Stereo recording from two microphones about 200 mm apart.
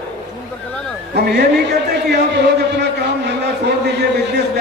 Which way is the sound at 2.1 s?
60° right (ahead or behind).